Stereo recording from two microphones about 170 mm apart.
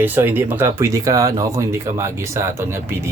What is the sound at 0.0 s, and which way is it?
Speech, 10° right (ahead or behind).